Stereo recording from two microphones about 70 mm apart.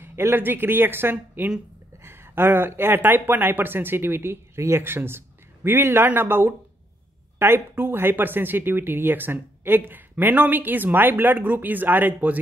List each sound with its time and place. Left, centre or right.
0.0 s a woman's voice: right